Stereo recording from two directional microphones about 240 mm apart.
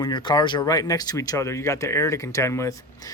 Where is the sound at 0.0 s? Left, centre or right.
Centre.